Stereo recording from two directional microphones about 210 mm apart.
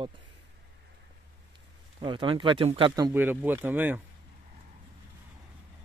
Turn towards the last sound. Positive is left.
turn(degrees=-10)  # may be behind; listen again after turning